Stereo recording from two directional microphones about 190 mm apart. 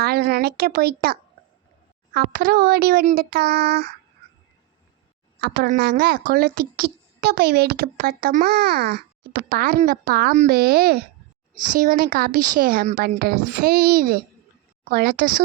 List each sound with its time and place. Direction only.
0.0 s a woman's voice: 55° right (ahead or behind)
5.6 s a woman's voice: 45° right (ahead or behind)